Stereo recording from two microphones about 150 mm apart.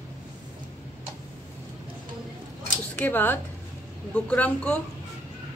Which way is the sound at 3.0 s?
15° left (ahead or behind).